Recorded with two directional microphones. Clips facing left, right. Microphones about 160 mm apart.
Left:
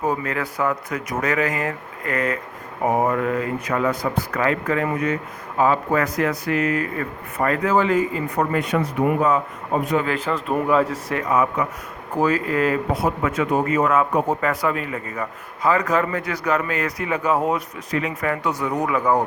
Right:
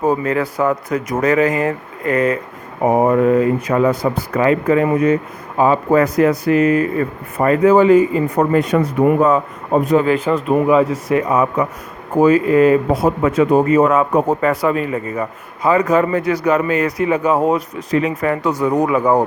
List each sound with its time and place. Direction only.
0.0 s speech: 30° right (ahead or behind)
8.5 s speech: 40° right (ahead or behind)
10.0 s speech: 20° right (ahead or behind)
10.7 s speech: 10° right (ahead or behind)
11.2 s speech: 30° right (ahead or behind)
14.1 s speech: 40° right (ahead or behind)
14.4 s speech: 30° right (ahead or behind)
18.4 s speech: 35° right (ahead or behind)